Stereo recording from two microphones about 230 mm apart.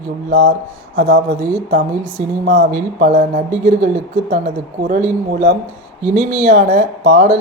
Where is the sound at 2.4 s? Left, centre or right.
Right.